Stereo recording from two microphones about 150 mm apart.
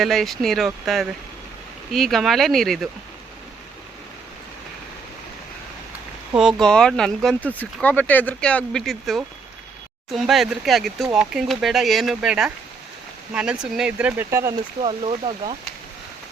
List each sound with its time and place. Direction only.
0.0 s speech: centre (ahead or behind)
6.3 s speech: 5° right (ahead or behind); by 14.5 s 20° right (ahead or behind)
14.8 s speech: 40° right (ahead or behind)